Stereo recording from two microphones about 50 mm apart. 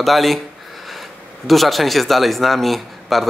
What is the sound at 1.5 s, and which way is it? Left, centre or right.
Speech, centre.